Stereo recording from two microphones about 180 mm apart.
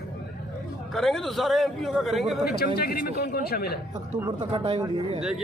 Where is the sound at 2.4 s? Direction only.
60° left (ahead or behind).